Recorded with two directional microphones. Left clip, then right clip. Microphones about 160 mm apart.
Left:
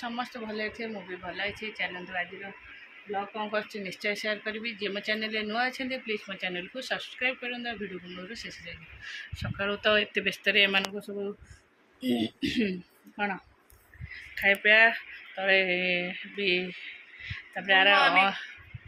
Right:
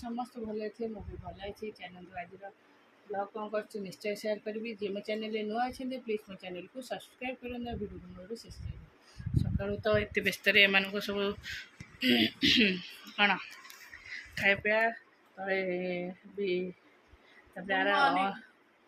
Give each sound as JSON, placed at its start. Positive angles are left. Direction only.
{"t": 0.2, "sound": "speech", "side_deg": 5}
{"t": 3.3, "sound": "mantra", "side_deg": 15}
{"t": 3.7, "sound": "speech", "side_deg": 0}
{"t": 8.3, "sound": "mantra", "side_deg": 10}
{"t": 9.3, "sound": "speech", "side_deg": 5}
{"t": 12.1, "sound": "speech", "side_deg": 25}
{"t": 14.3, "sound": "mantra", "side_deg": 10}
{"t": 17.7, "sound": "mantra", "side_deg": 10}